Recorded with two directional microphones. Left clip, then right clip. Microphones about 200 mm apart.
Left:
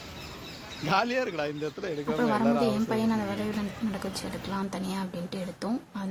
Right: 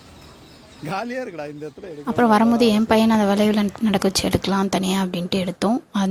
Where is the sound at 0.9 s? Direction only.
40° right (ahead or behind).